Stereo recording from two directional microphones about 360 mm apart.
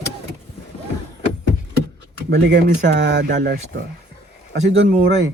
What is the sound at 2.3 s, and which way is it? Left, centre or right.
Speech, right.